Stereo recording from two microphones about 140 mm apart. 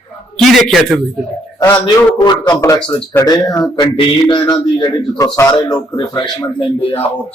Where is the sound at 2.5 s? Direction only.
20° left (ahead or behind); by 6.9 s 35° left (ahead or behind).